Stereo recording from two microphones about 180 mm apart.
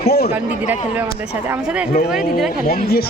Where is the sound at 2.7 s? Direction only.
55° left (ahead or behind).